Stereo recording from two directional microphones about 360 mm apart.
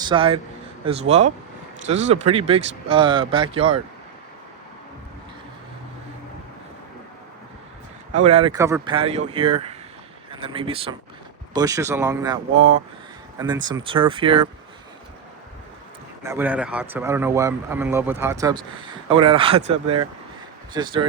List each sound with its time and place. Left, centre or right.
0.0 s a man's voice: centre
8.3 s speech: centre
16.2 s speech: centre
20.7 s speech: centre